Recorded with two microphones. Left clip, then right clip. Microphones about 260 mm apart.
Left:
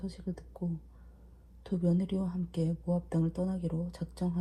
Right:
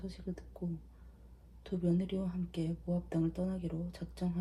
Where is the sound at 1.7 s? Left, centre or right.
Left.